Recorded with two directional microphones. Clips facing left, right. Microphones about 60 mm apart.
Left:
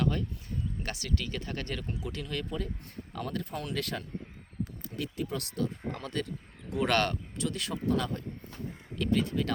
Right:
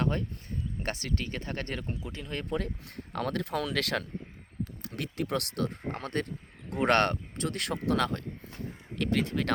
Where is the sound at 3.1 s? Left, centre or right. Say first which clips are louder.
Right 5 dB; right.